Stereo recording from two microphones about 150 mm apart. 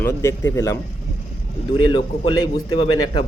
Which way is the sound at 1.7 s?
30° left (ahead or behind).